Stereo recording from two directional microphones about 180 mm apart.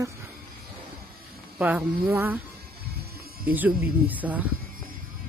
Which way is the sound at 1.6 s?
10° right (ahead or behind).